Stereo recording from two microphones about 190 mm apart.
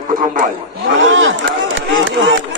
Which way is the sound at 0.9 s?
90° right.